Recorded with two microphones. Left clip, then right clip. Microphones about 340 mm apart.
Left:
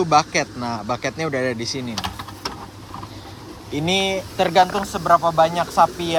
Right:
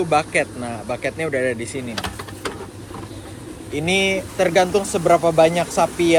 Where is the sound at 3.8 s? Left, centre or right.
Centre.